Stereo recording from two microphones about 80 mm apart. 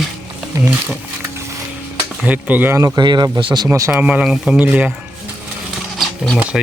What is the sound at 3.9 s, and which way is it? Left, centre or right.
Speech, centre.